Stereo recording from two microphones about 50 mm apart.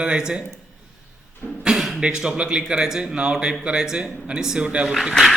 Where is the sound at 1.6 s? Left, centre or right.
Centre.